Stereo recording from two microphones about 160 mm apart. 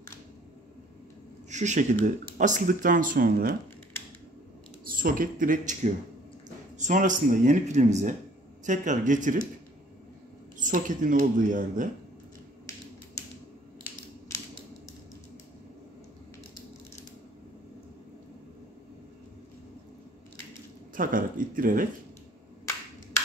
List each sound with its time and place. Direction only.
1.5 s speech: 50° right (ahead or behind)
4.8 s speech: 60° right (ahead or behind)
6.8 s speech: 55° right (ahead or behind)
10.6 s speech: 55° right (ahead or behind)
20.9 s speech: 60° right (ahead or behind)